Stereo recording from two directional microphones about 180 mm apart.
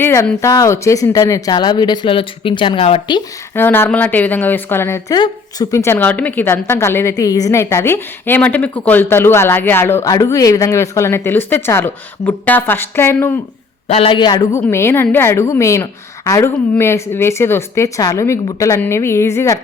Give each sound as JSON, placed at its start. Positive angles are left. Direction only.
{"t": 0.0, "sound": "a woman's voice", "side_deg": 15}
{"t": 3.5, "sound": "a woman's voice", "side_deg": 10}
{"t": 13.8, "sound": "a woman's voice", "side_deg": 35}